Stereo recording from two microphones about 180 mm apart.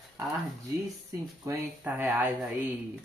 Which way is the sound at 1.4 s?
20° right (ahead or behind).